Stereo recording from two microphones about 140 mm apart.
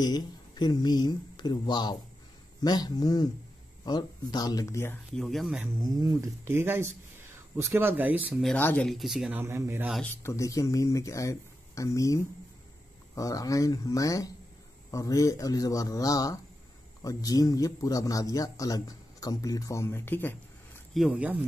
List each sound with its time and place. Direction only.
0.0 s speech: 30° left (ahead or behind)
5.1 s speech: centre (ahead or behind)
5.9 s speech: 25° right (ahead or behind)
6.4 s speech: 15° right (ahead or behind)
8.5 s speech: 10° left (ahead or behind)
9.3 s speech: 15° right (ahead or behind)
10.0 s speech: 20° left (ahead or behind)
20.9 s speech: 5° right (ahead or behind)